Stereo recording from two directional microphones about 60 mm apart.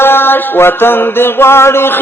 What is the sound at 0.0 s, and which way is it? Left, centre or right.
Mantra, left.